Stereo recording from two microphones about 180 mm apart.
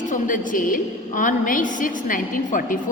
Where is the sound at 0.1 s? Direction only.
50° left (ahead or behind).